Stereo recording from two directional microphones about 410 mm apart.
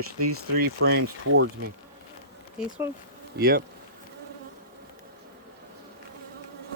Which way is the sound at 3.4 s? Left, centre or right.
Right.